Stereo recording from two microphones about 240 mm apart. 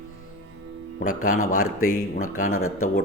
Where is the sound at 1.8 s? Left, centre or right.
Left.